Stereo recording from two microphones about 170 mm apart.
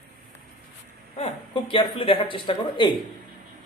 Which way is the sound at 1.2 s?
35° left (ahead or behind).